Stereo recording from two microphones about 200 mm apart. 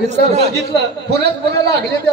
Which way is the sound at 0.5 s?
55° right (ahead or behind).